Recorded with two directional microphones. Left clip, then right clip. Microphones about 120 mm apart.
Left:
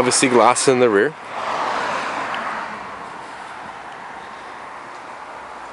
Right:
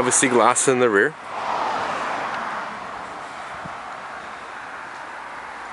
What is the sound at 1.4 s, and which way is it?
Waves, 20° left (ahead or behind).